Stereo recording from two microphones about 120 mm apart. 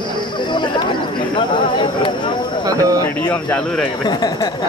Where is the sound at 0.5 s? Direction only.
40° left (ahead or behind).